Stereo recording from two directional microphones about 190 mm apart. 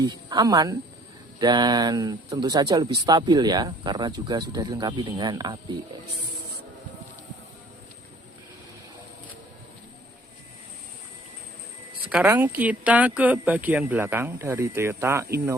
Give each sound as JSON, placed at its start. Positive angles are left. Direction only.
{"t": 0.0, "sound": "speech", "side_deg": -20}
{"t": 12.0, "sound": "a woman's voice", "side_deg": -5}